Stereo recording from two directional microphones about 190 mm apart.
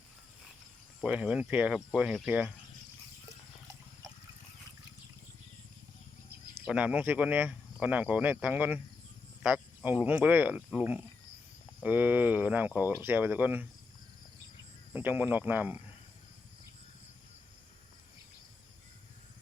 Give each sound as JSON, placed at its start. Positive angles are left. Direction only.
{"t": 1.0, "sound": "speech", "side_deg": -5}
{"t": 3.2, "sound": "water", "side_deg": -15}
{"t": 6.5, "sound": "speech", "side_deg": -5}
{"t": 14.9, "sound": "speech", "side_deg": -10}